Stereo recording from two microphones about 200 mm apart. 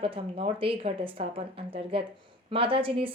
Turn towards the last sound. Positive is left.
turn(degrees=-25)  # may be behind; listen again after turning